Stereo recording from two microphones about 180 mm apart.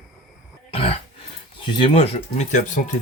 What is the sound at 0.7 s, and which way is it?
Throat clearing, 35° left (ahead or behind).